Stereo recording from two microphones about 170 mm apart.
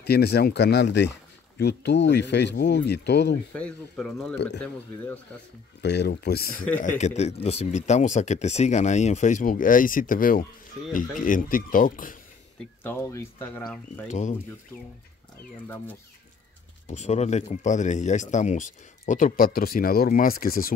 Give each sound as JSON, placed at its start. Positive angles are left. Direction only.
{"t": 0.0, "sound": "speech", "side_deg": 70}
{"t": 1.6, "sound": "speech", "side_deg": 80}
{"t": 3.5, "sound": "speech", "side_deg": 5}
{"t": 5.8, "sound": "speech", "side_deg": 80}
{"t": 6.8, "sound": "a man's voice", "side_deg": 45}
{"t": 12.8, "sound": "speech", "side_deg": 15}
{"t": 16.8, "sound": "speech", "side_deg": 45}